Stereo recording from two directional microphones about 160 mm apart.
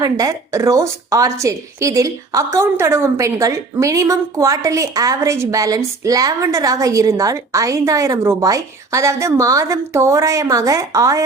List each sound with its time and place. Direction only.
0.0 s a woman's voice: 20° right (ahead or behind)